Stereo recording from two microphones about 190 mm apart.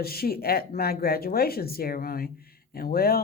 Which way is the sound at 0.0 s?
55° left (ahead or behind).